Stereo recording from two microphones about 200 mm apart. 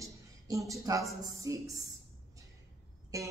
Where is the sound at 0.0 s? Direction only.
15° right (ahead or behind).